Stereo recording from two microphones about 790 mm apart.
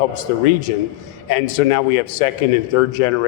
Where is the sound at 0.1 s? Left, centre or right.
Left.